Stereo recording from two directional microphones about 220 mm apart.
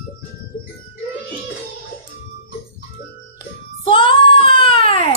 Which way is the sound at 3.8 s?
25° left (ahead or behind).